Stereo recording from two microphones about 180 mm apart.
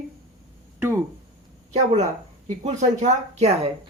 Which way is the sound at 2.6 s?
40° right (ahead or behind).